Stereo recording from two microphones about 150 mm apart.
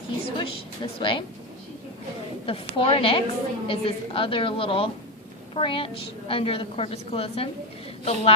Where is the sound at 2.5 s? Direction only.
40° left (ahead or behind).